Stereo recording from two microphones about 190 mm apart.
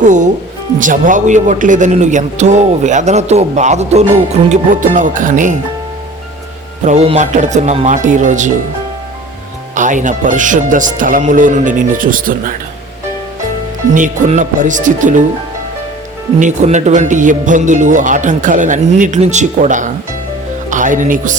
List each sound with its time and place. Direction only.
0.0 s speech: 40° right (ahead or behind)
6.8 s speech: 35° right (ahead or behind)
9.7 s speech: 40° right (ahead or behind)
13.9 s speech: 40° right (ahead or behind)
16.4 s speech: 40° right (ahead or behind)